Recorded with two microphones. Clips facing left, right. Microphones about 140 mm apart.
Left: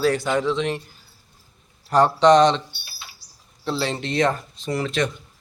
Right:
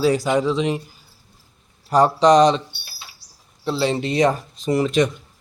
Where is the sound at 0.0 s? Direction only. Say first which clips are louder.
Right 3 dB; 10° right (ahead or behind).